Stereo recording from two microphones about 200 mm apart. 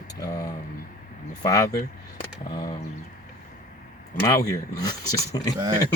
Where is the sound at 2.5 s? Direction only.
20° left (ahead or behind).